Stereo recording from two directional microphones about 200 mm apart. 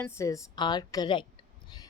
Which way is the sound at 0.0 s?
15° left (ahead or behind).